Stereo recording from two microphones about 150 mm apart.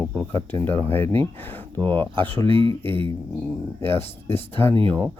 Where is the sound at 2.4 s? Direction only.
35° right (ahead or behind).